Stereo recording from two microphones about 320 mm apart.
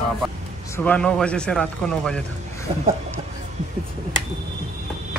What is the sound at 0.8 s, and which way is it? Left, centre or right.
A man's voice, centre.